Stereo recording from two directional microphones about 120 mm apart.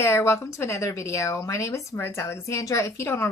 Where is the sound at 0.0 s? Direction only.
20° left (ahead or behind).